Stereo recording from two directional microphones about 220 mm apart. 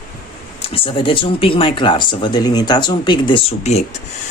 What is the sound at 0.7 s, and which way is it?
Speech, 25° left (ahead or behind).